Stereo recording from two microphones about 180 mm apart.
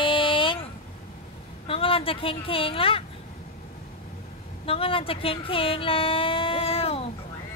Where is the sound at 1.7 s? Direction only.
30° left (ahead or behind).